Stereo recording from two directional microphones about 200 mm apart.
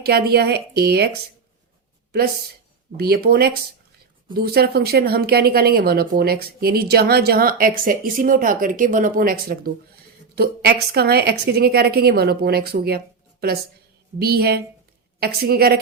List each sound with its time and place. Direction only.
0.0 s speech: 50° right (ahead or behind)
3.0 s speech: 50° right (ahead or behind)
14.2 s speech: 50° right (ahead or behind)